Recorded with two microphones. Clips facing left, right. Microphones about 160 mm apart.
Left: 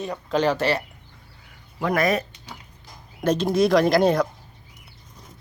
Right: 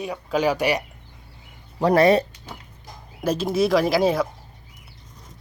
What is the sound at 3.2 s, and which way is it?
Speech, 5° right (ahead or behind).